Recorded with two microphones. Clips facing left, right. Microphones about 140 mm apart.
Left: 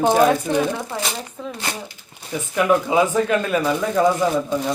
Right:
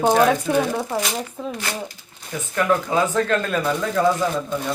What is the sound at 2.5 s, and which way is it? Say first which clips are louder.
Speech: left 3 dB; 15° left (ahead or behind).